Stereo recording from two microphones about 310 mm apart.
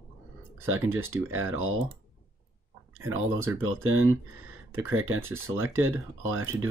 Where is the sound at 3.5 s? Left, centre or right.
Centre.